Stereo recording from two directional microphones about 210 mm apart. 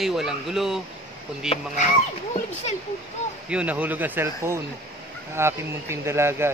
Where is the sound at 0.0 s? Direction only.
Centre (ahead or behind).